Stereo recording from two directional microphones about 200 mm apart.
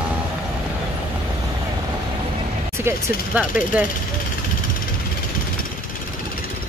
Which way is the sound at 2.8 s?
5° right (ahead or behind).